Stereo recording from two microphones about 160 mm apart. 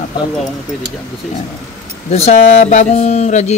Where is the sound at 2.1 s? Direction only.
40° left (ahead or behind).